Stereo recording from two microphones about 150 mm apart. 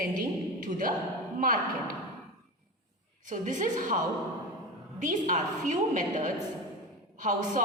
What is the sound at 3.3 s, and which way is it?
Speech, 60° right (ahead or behind).